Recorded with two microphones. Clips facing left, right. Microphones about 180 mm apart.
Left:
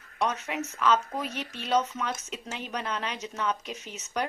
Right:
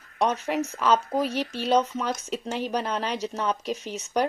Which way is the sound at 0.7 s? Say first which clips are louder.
Right 2 dB; 35° right (ahead or behind).